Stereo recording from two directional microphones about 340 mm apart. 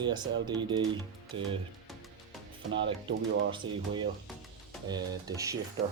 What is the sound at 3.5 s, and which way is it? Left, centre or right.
Speech, centre.